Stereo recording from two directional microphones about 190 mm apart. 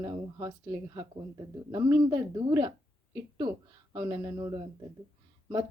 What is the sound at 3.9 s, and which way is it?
Speech, 20° right (ahead or behind).